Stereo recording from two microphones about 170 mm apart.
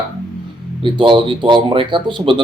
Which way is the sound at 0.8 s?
30° right (ahead or behind).